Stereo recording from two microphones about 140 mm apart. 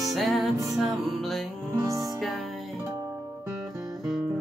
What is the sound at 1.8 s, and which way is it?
Music, 25° right (ahead or behind).